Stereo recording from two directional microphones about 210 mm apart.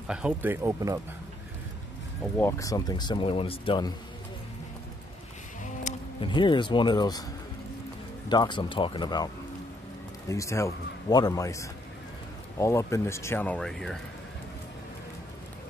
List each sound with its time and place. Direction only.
0.1 s speech: 5° right (ahead or behind)
2.3 s speech: 15° left (ahead or behind)
5.9 s a sound: 35° left (ahead or behind)
6.2 s speech: 20° left (ahead or behind)
8.3 s a man's voice: 20° left (ahead or behind); by 13.9 s 5° left (ahead or behind)